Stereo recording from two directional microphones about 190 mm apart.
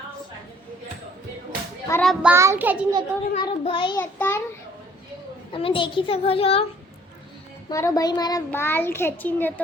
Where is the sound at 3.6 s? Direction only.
25° left (ahead or behind).